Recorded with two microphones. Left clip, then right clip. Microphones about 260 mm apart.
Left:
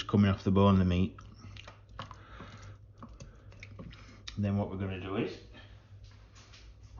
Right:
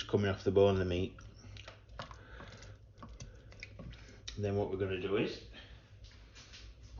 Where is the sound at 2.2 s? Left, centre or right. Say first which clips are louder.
Left 2 dB; left.